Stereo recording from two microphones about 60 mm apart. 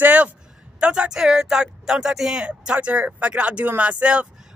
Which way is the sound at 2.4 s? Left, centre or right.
Centre.